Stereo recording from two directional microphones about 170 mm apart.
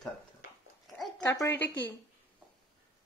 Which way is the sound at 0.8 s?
Centre (ahead or behind).